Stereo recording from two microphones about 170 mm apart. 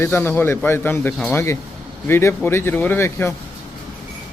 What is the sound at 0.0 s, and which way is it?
Speech, 15° left (ahead or behind).